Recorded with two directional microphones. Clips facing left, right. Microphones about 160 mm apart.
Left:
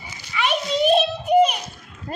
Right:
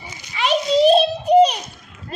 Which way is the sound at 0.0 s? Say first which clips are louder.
Right 1 dB; 25° right (ahead or behind).